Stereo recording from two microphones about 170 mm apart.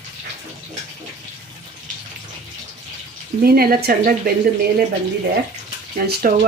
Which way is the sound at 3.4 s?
60° right (ahead or behind).